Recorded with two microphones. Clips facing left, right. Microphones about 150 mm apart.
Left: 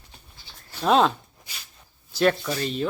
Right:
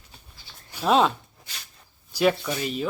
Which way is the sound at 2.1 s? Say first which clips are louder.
Even; 10° right (ahead or behind).